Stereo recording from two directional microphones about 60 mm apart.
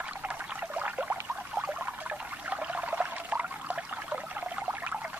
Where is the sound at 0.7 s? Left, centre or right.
Right.